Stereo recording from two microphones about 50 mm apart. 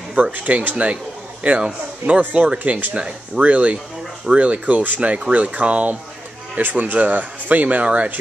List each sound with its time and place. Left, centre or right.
0.2 s speech: right